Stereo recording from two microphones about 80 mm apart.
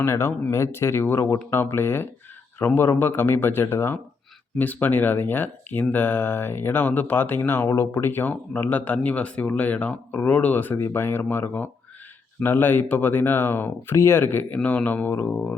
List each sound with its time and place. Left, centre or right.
0.0 s speech: left